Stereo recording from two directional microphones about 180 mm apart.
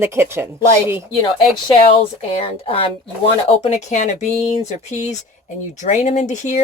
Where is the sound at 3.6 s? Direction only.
40° left (ahead or behind).